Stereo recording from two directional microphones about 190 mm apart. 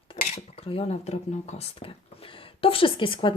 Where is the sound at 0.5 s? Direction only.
30° left (ahead or behind).